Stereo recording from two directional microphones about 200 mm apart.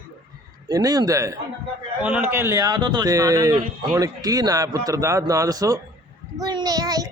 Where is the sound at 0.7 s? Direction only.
20° right (ahead or behind).